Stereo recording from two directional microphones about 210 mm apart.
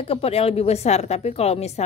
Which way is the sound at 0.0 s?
30° left (ahead or behind).